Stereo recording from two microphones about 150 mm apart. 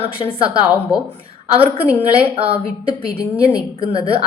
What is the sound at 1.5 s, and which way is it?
A woman's voice, 40° right (ahead or behind).